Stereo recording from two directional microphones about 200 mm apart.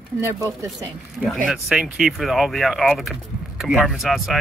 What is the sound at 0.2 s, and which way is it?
Speech, 15° right (ahead or behind).